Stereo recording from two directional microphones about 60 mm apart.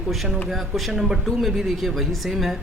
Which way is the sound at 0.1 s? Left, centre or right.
Centre.